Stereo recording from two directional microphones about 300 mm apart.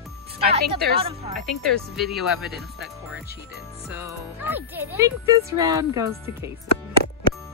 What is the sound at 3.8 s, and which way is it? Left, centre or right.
Speech, centre.